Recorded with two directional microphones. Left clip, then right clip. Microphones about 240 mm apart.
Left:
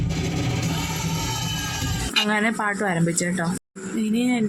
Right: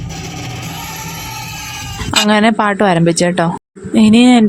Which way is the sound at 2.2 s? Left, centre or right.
Right.